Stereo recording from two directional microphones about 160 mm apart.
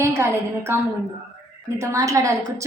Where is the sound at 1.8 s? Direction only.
20° right (ahead or behind).